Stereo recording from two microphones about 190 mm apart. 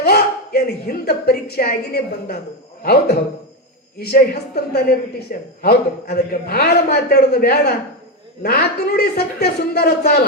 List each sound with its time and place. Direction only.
0.0 s a woman's voice: 55° left (ahead or behind)